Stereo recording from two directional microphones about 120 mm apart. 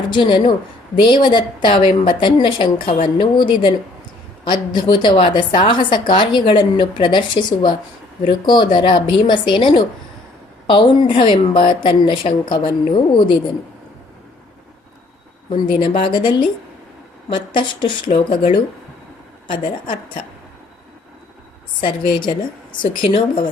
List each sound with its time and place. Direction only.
0.1 s a woman's voice: 40° left (ahead or behind)
11.1 s a woman's voice: 45° left (ahead or behind)
15.4 s a woman's voice: 40° left (ahead or behind)
21.8 s a woman's voice: 45° left (ahead or behind)